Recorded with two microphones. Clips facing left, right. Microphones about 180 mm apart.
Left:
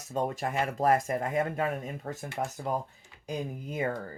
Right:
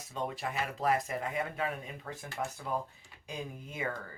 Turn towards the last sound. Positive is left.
turn(degrees=40)  # may be behind; listen again after turning